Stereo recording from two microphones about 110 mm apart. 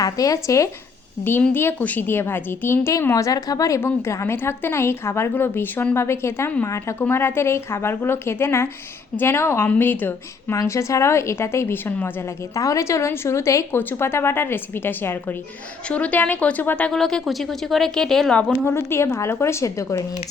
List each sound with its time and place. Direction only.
0.0 s speech: 30° left (ahead or behind)
3.8 s speech: 20° left (ahead or behind)
12.5 s speech: 30° left (ahead or behind); by 18.5 s 5° left (ahead or behind)
18.6 s speech: 25° left (ahead or behind)